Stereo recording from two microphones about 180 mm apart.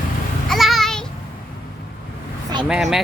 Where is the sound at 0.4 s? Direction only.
Centre (ahead or behind).